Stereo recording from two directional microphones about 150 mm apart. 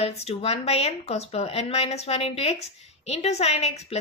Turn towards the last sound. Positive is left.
turn(degrees=45)  # may be behind; listen again after turning